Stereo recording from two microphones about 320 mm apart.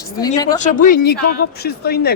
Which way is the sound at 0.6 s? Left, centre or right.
Left.